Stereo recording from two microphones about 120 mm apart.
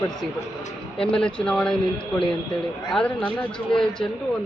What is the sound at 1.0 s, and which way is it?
Speech, 5° left (ahead or behind).